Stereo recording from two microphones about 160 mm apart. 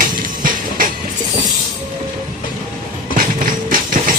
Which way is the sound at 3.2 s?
60° right (ahead or behind).